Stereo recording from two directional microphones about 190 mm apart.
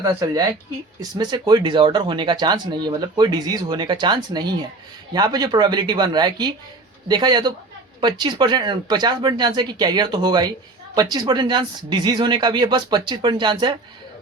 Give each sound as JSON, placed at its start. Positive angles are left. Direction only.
{"t": 0.0, "sound": "speech", "side_deg": -15}